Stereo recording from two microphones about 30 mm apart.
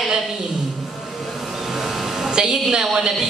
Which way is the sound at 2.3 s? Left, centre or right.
Right.